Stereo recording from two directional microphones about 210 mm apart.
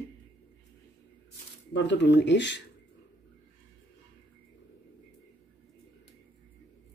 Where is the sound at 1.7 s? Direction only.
55° left (ahead or behind).